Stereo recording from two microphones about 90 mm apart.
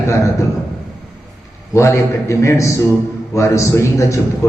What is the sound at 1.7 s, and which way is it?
A man's voice, 35° left (ahead or behind).